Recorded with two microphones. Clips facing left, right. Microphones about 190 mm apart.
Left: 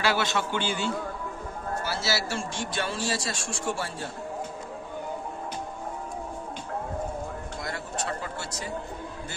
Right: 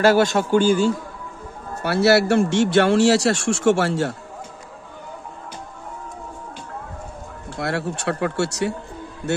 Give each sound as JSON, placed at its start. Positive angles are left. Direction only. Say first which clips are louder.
{"t": 0.0, "sound": "a man's voice", "louder": "right 10 dB", "side_deg": -45}
{"t": 1.8, "sound": "speech", "louder": "right 15 dB", "side_deg": -60}
{"t": 7.5, "sound": "speech", "louder": "right 13 dB", "side_deg": -70}